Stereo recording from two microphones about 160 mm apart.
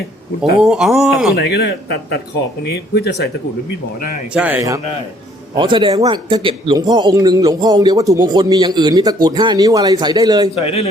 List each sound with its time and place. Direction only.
0.6 s speech: centre (ahead or behind)
1.4 s speech: 90° left
4.4 s speech: 10° right (ahead or behind)
5.5 s a man's voice: 30° right (ahead or behind)
10.5 s a man's voice: 40° left (ahead or behind)